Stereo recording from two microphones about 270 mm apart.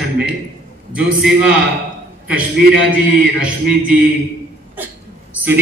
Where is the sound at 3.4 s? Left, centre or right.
Centre.